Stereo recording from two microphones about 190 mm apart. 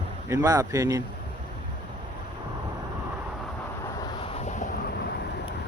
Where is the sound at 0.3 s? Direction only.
20° right (ahead or behind).